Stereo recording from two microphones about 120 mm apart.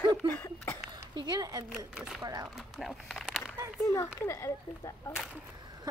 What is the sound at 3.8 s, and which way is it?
Speech, 20° left (ahead or behind).